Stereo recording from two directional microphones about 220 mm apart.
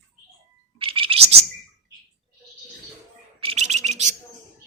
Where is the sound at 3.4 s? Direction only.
30° right (ahead or behind).